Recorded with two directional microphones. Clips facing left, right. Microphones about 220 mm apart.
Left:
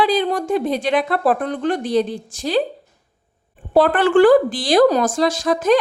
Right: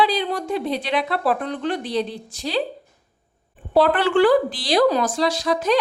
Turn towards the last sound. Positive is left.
turn(degrees=50)  # may be behind; listen again after turning